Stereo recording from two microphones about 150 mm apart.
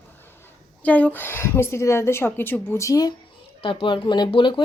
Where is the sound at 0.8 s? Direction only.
10° left (ahead or behind).